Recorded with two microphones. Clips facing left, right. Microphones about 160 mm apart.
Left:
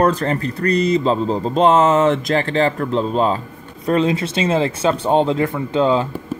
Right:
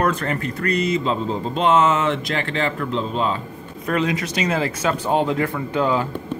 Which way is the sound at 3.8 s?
30° left (ahead or behind).